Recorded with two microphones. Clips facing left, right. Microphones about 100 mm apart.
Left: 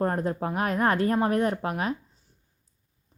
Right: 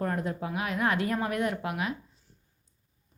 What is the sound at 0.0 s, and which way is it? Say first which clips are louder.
A woman's voice: left 4 dB; 35° left (ahead or behind).